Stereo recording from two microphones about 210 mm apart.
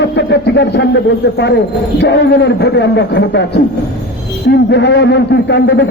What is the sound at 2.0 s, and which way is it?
A man's voice, 55° left (ahead or behind).